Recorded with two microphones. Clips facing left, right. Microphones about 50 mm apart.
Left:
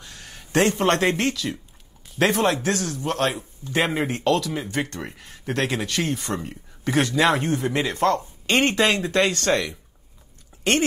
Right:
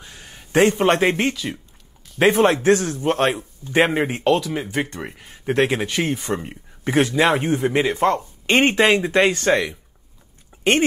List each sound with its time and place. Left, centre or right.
0.0 s a man's voice: centre
2.4 s speech: right
10.5 s a sound: centre